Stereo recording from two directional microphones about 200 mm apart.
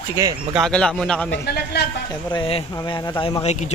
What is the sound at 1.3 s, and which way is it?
Speech, 55° left (ahead or behind).